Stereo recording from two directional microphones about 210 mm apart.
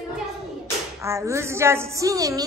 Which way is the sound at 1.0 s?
15° right (ahead or behind).